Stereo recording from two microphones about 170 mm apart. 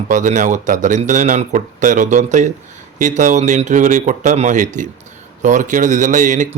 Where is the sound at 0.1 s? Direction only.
45° right (ahead or behind).